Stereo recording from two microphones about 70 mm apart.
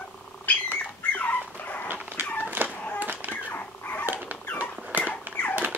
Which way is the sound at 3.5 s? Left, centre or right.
Left.